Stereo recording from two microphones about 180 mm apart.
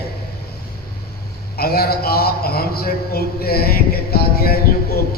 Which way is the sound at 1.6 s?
60° left (ahead or behind).